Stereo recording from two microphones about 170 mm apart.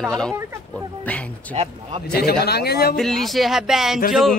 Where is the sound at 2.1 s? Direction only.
70° left (ahead or behind).